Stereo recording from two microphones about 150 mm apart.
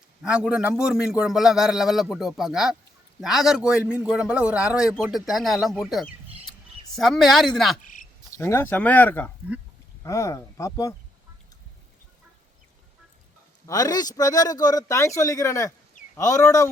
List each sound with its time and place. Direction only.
0.2 s a man's voice: 5° right (ahead or behind)
8.4 s a man's voice: 15° left (ahead or behind)
13.7 s a man's voice: 25° left (ahead or behind)